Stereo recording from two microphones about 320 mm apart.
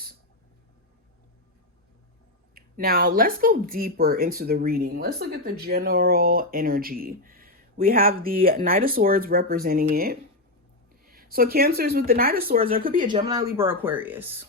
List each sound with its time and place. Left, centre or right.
2.6 s speech: right
13.2 s speech: centre